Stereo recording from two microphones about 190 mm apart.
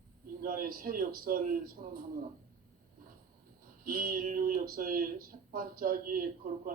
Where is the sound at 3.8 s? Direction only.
50° right (ahead or behind).